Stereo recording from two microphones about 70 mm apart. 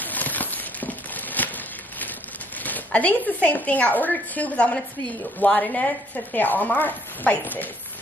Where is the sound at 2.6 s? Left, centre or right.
Left.